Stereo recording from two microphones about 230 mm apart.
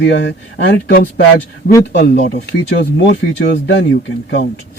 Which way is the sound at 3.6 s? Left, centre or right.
Left.